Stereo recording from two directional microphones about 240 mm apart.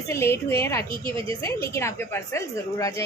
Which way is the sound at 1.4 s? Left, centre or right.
Centre.